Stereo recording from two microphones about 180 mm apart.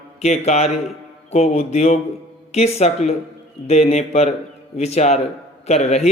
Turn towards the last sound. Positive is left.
turn(degrees=35)  # may be behind; listen again after turning